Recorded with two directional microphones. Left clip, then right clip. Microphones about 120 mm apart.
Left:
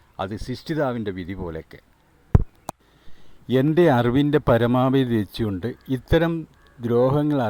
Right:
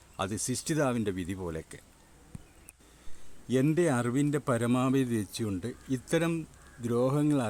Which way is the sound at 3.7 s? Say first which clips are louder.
Left 10 dB; 65° left (ahead or behind).